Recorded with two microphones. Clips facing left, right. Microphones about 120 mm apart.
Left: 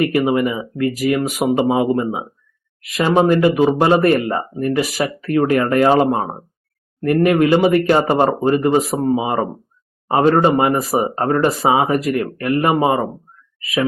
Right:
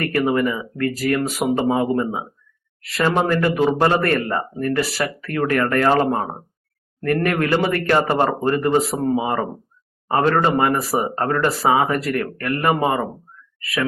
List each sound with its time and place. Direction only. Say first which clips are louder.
0.0 s speech: left 3 dB; 15° left (ahead or behind)